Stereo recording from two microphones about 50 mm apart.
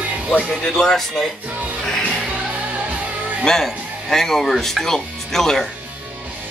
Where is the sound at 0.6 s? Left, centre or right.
Centre.